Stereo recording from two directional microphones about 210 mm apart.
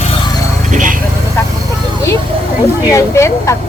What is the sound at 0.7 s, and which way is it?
Vehicle, 40° right (ahead or behind).